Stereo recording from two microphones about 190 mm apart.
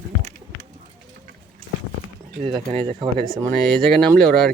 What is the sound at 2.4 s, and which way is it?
Speech, 30° right (ahead or behind).